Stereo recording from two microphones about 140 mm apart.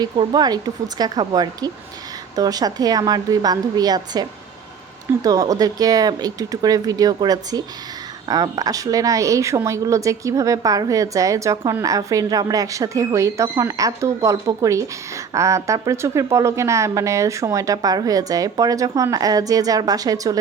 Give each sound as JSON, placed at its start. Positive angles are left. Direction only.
{"t": 0.0, "sound": "a woman's voice", "side_deg": -30}